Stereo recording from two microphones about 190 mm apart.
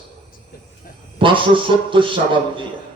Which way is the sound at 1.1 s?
25° right (ahead or behind).